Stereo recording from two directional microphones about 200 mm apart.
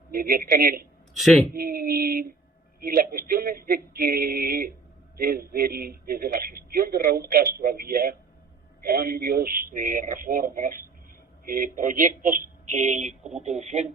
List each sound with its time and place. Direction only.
0.1 s speech: 50° right (ahead or behind)
1.1 s a man's voice: centre (ahead or behind)
1.5 s speech: 50° right (ahead or behind)